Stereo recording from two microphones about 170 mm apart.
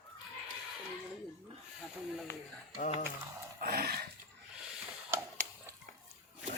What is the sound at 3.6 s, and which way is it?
Dog, 65° right (ahead or behind).